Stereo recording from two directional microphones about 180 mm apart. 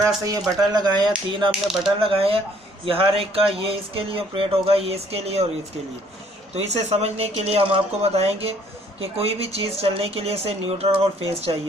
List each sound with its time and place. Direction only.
0.0 s speech: 20° right (ahead or behind)
1.5 s speech: centre (ahead or behind)
2.0 s speech: 30° right (ahead or behind)
6.5 s speech: 35° right (ahead or behind)